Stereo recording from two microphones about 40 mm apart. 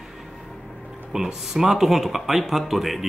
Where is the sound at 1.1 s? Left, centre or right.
Centre.